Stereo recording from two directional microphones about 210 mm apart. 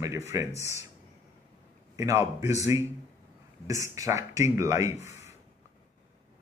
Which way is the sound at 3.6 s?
15° right (ahead or behind).